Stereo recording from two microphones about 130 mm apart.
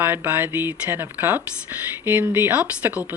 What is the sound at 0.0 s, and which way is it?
Speech, 15° right (ahead or behind).